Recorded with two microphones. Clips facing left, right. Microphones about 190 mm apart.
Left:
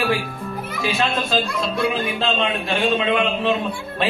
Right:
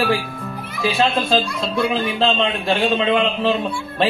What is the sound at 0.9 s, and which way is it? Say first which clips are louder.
A man's voice: right 4 dB; 30° right (ahead or behind).